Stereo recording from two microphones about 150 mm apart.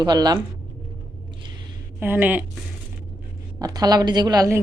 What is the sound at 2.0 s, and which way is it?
Speech, 15° right (ahead or behind).